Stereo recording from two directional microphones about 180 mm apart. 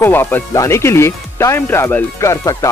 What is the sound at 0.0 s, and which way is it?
Speech, 10° left (ahead or behind).